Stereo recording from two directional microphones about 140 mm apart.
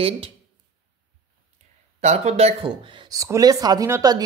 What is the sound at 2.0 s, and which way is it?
Speech, 50° right (ahead or behind).